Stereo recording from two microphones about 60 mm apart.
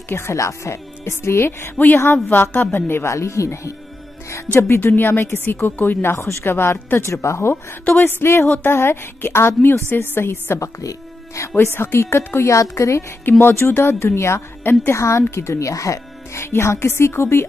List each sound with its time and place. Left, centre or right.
0.1 s speech: left
2.2 s a woman's voice: left
3.1 s speech: left
4.5 s a woman's voice: left
6.1 s speech: left
6.5 s a woman's voice: left
10.6 s speech: left
11.5 s a woman's voice: left
12.4 s speech: left
13.2 s a woman's voice: left
14.9 s speech: left
15.7 s speech: left
16.4 s speech: left